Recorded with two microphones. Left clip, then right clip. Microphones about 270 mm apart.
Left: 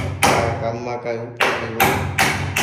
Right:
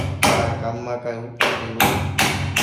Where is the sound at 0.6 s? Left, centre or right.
Centre.